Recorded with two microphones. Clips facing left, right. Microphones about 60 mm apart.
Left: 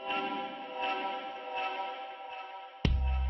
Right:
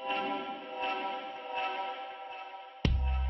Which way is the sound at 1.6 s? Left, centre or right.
Right.